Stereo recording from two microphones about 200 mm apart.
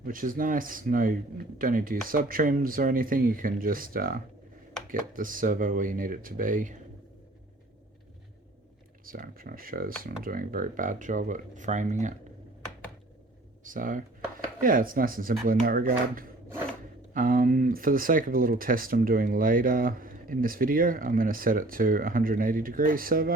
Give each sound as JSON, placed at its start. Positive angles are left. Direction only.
{"t": 0.0, "sound": "speech", "side_deg": -45}
{"t": 9.0, "sound": "speech", "side_deg": -45}
{"t": 13.7, "sound": "speech", "side_deg": -40}